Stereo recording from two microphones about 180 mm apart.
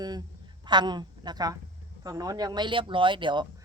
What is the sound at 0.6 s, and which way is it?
A woman's voice, 25° right (ahead or behind).